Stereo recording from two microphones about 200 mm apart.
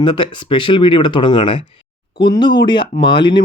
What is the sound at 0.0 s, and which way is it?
Speech, 25° left (ahead or behind).